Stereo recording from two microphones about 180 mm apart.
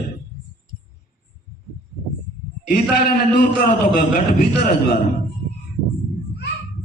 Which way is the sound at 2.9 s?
55° left (ahead or behind).